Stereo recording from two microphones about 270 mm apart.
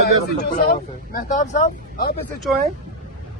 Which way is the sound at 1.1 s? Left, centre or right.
Left.